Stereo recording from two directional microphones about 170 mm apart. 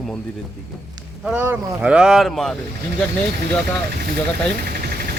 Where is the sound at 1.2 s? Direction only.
10° right (ahead or behind).